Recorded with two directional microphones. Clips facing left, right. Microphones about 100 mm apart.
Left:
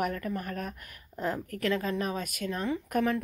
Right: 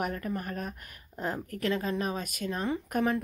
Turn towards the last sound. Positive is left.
turn(degrees=-25)  # may be behind; listen again after turning